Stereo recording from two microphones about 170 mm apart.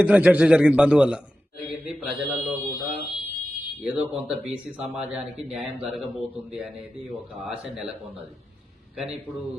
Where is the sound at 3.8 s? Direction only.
5° right (ahead or behind).